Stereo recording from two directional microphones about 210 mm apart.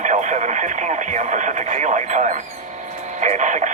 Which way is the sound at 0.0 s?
35° right (ahead or behind).